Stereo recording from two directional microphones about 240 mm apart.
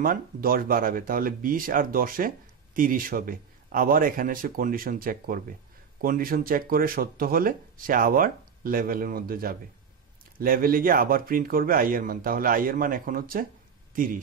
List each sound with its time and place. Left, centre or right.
0.0 s speech: right